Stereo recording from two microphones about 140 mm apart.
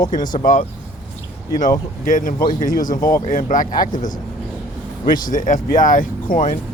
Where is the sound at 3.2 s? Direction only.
70° left (ahead or behind).